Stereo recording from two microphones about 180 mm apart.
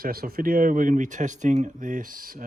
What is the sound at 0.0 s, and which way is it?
Speech, 55° right (ahead or behind).